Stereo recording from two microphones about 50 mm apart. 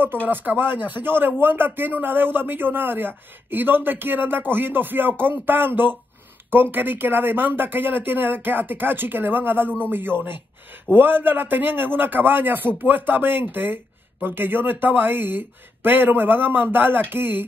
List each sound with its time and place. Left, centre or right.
0.0 s a man's voice: right